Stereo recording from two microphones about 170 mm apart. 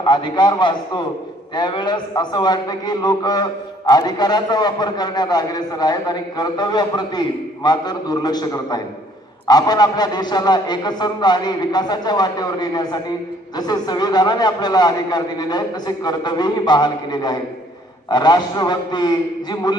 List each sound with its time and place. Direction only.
0.0 s a man's voice: 25° left (ahead or behind)